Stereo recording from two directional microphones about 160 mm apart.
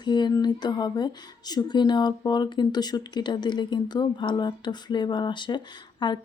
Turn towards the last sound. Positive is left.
turn(degrees=30)  # may be behind; listen again after turning